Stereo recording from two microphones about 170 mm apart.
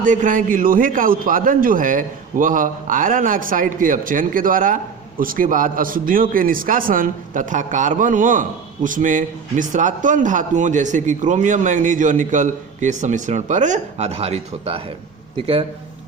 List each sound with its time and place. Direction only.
0.0 s a man's voice: 50° right (ahead or behind); by 15.6 s 30° right (ahead or behind)